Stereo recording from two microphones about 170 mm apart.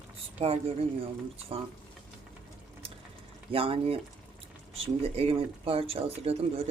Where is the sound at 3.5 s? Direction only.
35° right (ahead or behind).